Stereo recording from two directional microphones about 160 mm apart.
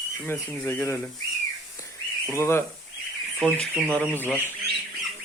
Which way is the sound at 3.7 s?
10° left (ahead or behind).